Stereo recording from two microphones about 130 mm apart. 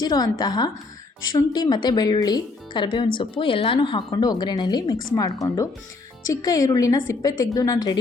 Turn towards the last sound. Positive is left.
turn(degrees=25)  # may be behind; listen again after turning